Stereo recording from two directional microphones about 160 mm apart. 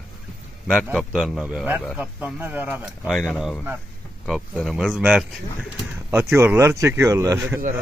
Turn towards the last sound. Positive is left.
turn(degrees=-20)  # may be behind; listen again after turning